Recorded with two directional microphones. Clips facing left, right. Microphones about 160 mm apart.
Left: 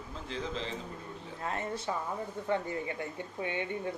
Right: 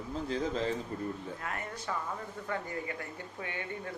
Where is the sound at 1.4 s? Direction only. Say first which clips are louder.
Left 4 dB; 25° left (ahead or behind).